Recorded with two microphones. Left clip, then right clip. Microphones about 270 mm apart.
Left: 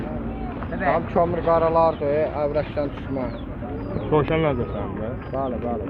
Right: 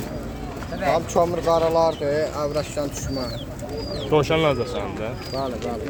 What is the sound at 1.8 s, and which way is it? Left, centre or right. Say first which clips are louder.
Speech: left 1 dB; right.